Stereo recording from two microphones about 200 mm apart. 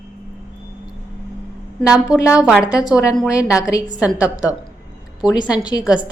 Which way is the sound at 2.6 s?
15° left (ahead or behind).